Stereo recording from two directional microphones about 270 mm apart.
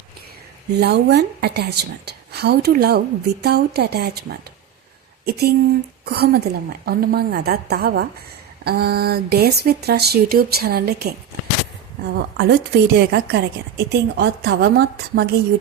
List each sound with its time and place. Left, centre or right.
0.7 s speech: right
12.1 s speech: right